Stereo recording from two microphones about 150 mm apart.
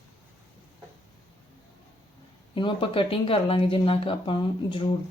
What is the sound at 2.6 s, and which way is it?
Speech, 35° left (ahead or behind).